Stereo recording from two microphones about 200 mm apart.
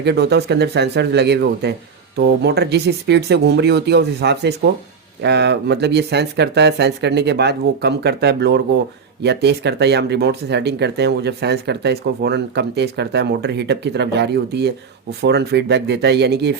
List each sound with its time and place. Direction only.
0.0 s speech: 55° right (ahead or behind)